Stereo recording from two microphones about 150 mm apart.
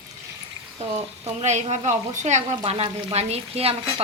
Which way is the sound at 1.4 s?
50° right (ahead or behind).